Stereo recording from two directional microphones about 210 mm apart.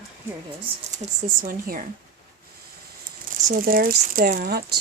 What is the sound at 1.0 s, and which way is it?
Speech, 40° right (ahead or behind).